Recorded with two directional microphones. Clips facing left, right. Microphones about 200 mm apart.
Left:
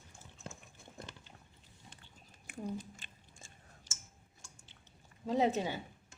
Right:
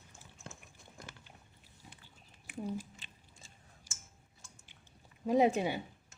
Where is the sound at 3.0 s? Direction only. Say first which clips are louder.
Even; 50° left (ahead or behind).